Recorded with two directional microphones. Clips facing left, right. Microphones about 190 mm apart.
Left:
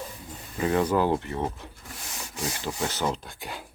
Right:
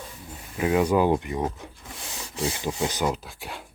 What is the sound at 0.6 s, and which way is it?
Speech, 10° right (ahead or behind).